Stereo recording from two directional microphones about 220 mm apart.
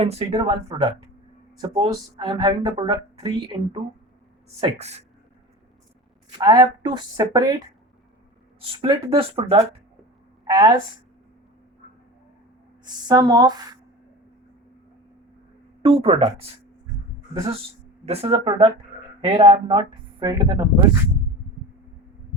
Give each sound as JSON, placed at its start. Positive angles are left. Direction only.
{"t": 0.0, "sound": "speech", "side_deg": -30}
{"t": 4.8, "sound": "speech", "side_deg": -30}
{"t": 6.4, "sound": "a woman's voice", "side_deg": -20}
{"t": 8.8, "sound": "a woman's voice", "side_deg": -20}
{"t": 12.8, "sound": "a woman's voice", "side_deg": -20}
{"t": 15.8, "sound": "speech", "side_deg": -25}
{"t": 18.0, "sound": "speech", "side_deg": -30}